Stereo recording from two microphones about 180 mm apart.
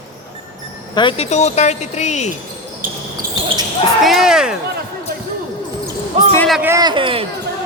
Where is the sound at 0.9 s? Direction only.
30° left (ahead or behind).